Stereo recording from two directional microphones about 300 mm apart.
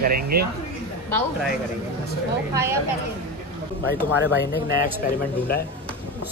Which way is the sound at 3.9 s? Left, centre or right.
Left.